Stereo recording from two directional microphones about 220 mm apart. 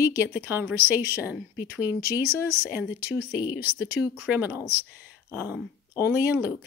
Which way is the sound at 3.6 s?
45° left (ahead or behind).